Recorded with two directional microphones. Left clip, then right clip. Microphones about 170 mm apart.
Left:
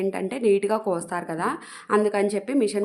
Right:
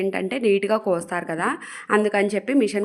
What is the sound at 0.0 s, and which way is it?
A woman's voice, 10° right (ahead or behind).